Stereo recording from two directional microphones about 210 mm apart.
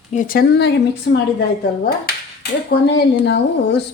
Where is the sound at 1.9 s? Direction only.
45° left (ahead or behind).